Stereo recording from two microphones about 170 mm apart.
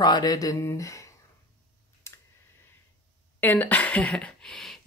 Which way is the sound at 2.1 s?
15° left (ahead or behind).